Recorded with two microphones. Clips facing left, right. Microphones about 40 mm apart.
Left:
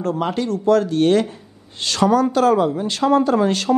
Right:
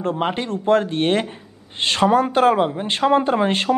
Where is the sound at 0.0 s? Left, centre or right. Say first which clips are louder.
Left 1 dB; right.